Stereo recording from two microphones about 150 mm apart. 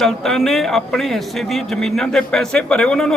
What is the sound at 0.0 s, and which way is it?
A man's voice, centre (ahead or behind).